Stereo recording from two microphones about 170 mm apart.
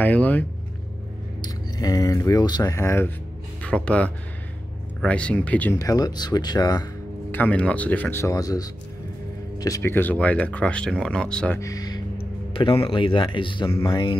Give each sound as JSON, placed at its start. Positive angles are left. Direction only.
{"t": 0.0, "sound": "speech", "side_deg": 10}
{"t": 1.4, "sound": "speech", "side_deg": 20}
{"t": 5.8, "sound": "speech", "side_deg": 20}
{"t": 7.2, "sound": "speech", "side_deg": 10}
{"t": 11.6, "sound": "a sound", "side_deg": 20}
{"t": 12.5, "sound": "speech", "side_deg": 30}
{"t": 13.7, "sound": "speech", "side_deg": 20}